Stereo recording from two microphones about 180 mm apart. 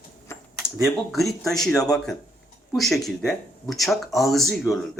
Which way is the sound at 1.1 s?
Centre (ahead or behind).